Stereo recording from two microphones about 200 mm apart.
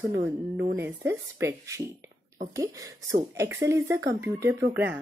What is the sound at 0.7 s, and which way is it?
A woman's voice, 10° right (ahead or behind).